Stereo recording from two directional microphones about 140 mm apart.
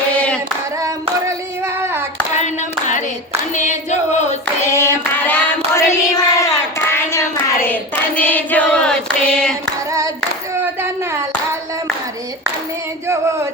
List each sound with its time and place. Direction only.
1.3 s child singing: 20° right (ahead or behind)
2.3 s clapping: 55° left (ahead or behind)
3.5 s singing: 60° left (ahead or behind)
4.6 s child singing: 20° left (ahead or behind)
7.6 s hands: 10° left (ahead or behind)